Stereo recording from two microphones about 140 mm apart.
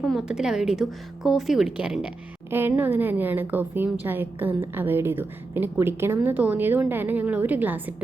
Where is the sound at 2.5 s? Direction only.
15° right (ahead or behind).